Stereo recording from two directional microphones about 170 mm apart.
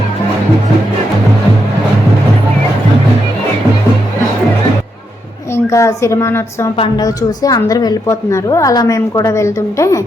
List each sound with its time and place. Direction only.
5.7 s a woman's voice: 20° left (ahead or behind)
6.7 s a woman's voice: 25° left (ahead or behind)